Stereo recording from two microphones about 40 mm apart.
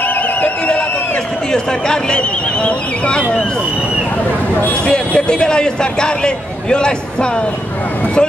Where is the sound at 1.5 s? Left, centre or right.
Centre.